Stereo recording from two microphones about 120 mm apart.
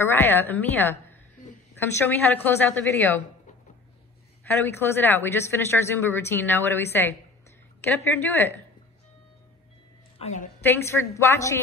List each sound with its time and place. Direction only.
0.0 s a woman's voice: 20° left (ahead or behind)
4.5 s a woman's voice: 15° left (ahead or behind)
10.1 s a woman's voice: 75° left (ahead or behind)
10.6 s a woman's voice: 20° left (ahead or behind)